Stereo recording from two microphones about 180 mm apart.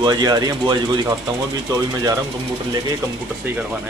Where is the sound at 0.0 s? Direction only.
20° right (ahead or behind).